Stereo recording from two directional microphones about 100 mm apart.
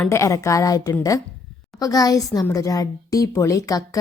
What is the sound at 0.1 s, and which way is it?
Speech, 30° left (ahead or behind).